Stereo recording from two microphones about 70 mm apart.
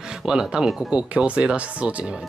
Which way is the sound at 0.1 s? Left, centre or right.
Centre.